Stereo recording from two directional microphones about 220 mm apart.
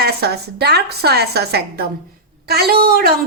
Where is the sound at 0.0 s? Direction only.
45° right (ahead or behind).